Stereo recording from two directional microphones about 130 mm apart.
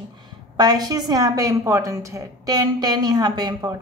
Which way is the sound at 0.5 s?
30° right (ahead or behind).